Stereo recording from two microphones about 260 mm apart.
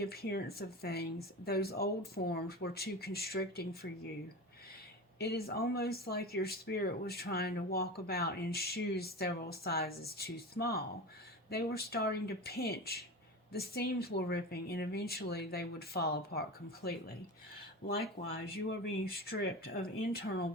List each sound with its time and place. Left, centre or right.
0.0 s speech: left
5.2 s speech: left
18.2 s speech: left
18.7 s speech: left